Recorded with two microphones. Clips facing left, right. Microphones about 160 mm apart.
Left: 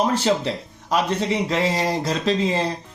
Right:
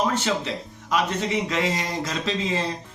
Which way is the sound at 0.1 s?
35° left (ahead or behind).